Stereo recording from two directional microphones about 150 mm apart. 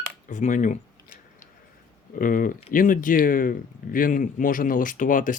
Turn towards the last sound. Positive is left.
turn(degrees=60)  # may be behind; listen again after turning